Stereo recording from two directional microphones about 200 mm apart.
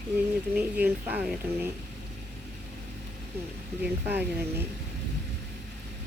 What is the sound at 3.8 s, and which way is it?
Speech, 10° right (ahead or behind).